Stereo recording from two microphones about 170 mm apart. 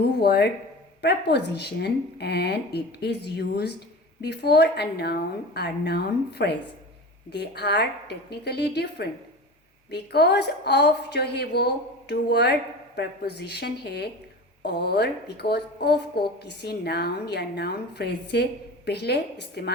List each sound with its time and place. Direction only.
0.0 s speech: 70° left (ahead or behind)